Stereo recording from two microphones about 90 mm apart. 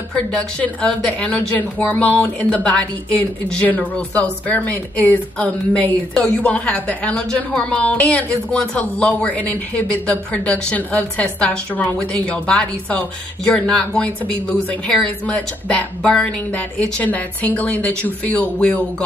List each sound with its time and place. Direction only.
0.1 s a woman's voice: 10° left (ahead or behind)